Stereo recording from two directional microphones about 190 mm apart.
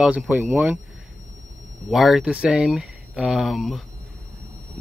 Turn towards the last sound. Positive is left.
turn(degrees=0)  # may be behind; listen again after turning